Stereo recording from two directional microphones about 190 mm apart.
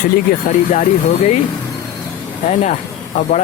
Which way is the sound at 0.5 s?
45° left (ahead or behind).